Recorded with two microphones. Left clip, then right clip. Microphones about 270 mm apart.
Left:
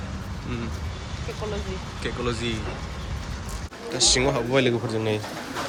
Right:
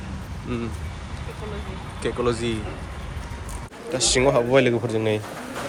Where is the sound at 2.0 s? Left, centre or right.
Centre.